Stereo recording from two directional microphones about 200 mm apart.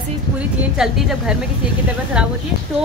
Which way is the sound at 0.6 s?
5° right (ahead or behind).